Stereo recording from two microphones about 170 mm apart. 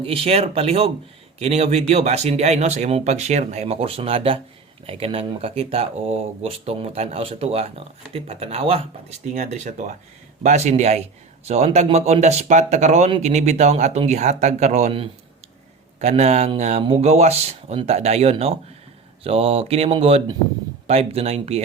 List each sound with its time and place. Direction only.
0.0 s a man's voice: 35° right (ahead or behind)
16.6 s a sound: 45° right (ahead or behind)
16.8 s a man's voice: 35° right (ahead or behind)